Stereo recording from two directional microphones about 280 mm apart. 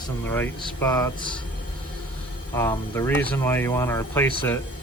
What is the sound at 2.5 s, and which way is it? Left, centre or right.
Speech, centre.